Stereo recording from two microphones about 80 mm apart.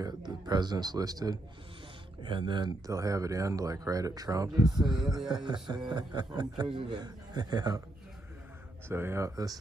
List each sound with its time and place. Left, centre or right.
0.0 s a man's voice: right
2.2 s speech: right
2.9 s a man's voice: right
8.8 s speech: right